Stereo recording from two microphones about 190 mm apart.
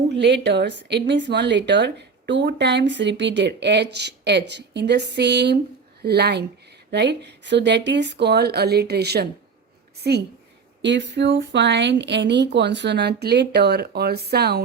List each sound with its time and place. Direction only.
0.1 s speech: 65° right (ahead or behind)